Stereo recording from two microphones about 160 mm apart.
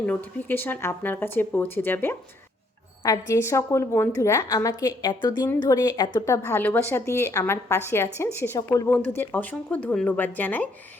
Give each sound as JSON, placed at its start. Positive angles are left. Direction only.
{"t": 0.0, "sound": "a woman's voice", "side_deg": 10}